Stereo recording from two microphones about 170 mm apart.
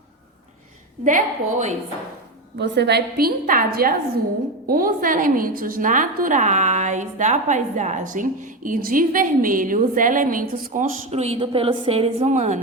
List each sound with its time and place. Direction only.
1.0 s a woman's voice: 45° right (ahead or behind)
2.6 s a woman's voice: 80° right; by 10.8 s 55° right (ahead or behind)
11.1 s a woman's voice: 40° right (ahead or behind)